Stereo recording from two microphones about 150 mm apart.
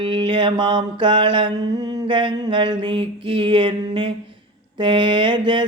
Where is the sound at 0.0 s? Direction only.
35° right (ahead or behind).